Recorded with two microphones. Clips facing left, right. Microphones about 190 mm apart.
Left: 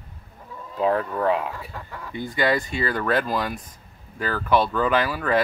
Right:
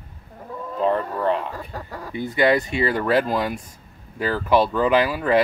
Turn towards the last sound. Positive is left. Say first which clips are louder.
# right 3 dB
turn(degrees=-15)  # may be behind; listen again after turning